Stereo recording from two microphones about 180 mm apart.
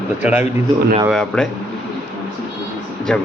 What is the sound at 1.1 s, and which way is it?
Speech, 5° left (ahead or behind).